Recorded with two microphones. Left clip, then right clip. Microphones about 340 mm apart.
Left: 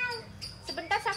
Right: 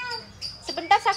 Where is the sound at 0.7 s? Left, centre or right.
Centre.